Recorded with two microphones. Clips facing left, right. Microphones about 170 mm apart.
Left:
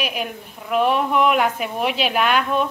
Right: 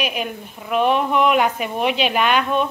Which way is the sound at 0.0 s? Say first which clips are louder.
Right 2 dB; centre (ahead or behind).